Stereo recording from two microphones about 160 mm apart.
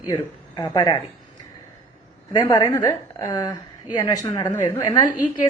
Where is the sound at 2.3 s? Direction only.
25° left (ahead or behind).